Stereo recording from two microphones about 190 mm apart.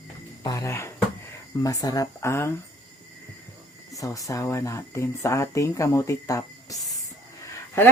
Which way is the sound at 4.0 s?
15° left (ahead or behind).